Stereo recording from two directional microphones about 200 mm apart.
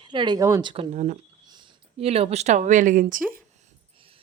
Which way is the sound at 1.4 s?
20° right (ahead or behind).